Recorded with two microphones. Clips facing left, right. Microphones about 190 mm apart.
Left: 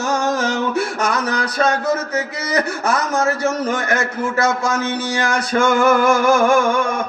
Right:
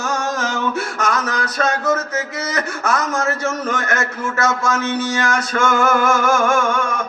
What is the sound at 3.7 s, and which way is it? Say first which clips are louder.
Music: left 2 dB; 35° left (ahead or behind).